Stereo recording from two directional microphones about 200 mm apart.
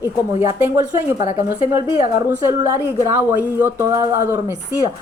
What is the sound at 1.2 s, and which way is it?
Speech, 40° left (ahead or behind).